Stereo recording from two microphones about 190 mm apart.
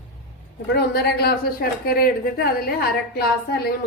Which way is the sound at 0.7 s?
55° left (ahead or behind).